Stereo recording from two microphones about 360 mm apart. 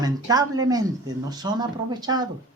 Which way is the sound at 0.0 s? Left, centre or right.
Centre.